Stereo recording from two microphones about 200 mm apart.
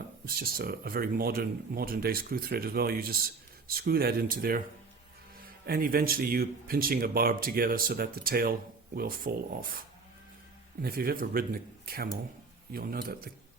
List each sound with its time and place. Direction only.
0.3 s speech: 50° right (ahead or behind)
5.6 s speech: 50° right (ahead or behind)
10.8 s speech: 50° right (ahead or behind)